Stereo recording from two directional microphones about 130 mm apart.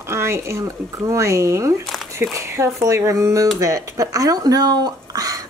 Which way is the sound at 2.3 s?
25° right (ahead or behind).